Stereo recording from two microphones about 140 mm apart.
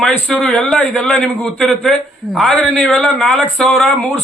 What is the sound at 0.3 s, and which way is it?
A man's voice, 5° left (ahead or behind).